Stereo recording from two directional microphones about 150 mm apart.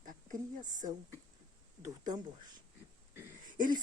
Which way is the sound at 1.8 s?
25° right (ahead or behind).